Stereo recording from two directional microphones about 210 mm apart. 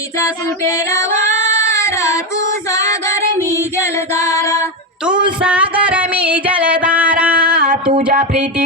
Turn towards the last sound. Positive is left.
turn(degrees=-45)  # may be behind; listen again after turning